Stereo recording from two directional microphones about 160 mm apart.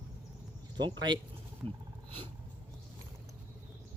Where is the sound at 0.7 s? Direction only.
25° right (ahead or behind).